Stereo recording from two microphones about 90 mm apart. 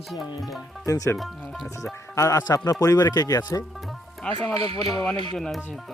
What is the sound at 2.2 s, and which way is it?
Speech, 40° left (ahead or behind).